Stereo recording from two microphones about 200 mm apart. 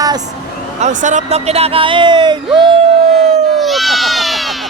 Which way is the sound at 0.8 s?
35° right (ahead or behind).